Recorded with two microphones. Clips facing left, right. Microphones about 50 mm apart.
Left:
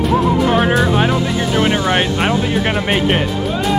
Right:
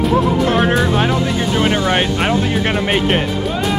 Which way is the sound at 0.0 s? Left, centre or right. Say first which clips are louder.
Even; centre.